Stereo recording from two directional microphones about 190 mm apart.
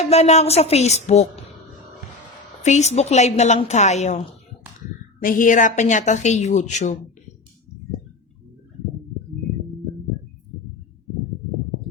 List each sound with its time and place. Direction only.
0.0 s speech: 35° left (ahead or behind)
2.6 s speech: 35° left (ahead or behind)
5.2 s speech: 45° left (ahead or behind)